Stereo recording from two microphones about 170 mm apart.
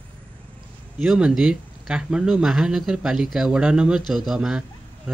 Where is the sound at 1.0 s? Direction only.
Centre (ahead or behind).